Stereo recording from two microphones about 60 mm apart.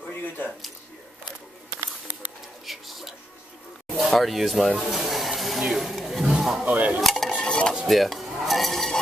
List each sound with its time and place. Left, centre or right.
2.6 s a sound: centre
6.3 s a man's voice: centre
6.6 s speech: right
7.0 s stir: centre
7.4 s stir: centre
7.7 s dishes: centre